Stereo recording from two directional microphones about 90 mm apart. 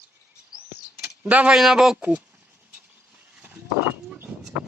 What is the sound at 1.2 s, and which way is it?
Speech, 15° right (ahead or behind).